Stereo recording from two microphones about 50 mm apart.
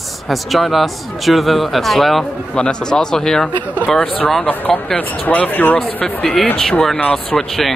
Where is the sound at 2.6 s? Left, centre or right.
Centre.